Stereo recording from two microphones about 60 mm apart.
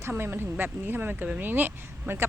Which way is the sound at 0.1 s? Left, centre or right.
Right.